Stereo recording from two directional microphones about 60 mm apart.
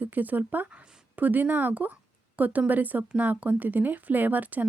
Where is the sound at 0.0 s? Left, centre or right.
Right.